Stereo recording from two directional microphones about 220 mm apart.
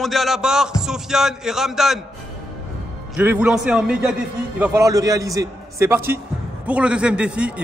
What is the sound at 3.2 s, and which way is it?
A man's voice, 5° right (ahead or behind).